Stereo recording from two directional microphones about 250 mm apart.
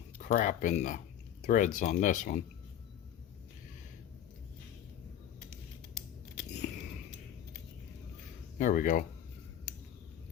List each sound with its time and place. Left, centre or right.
0.2 s speech: left
8.5 s speech: left